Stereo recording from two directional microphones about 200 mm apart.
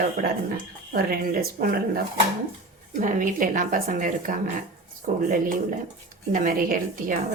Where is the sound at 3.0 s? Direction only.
40° right (ahead or behind).